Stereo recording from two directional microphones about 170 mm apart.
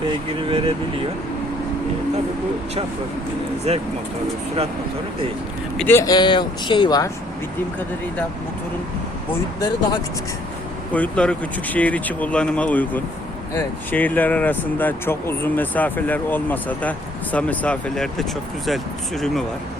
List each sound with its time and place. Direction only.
0.4 s vehicle: 30° right (ahead or behind)
3.7 s speech: 35° right (ahead or behind)
5.7 s speech: 10° left (ahead or behind)
9.6 s speech: 25° left (ahead or behind)
10.9 s speech: 10° left (ahead or behind)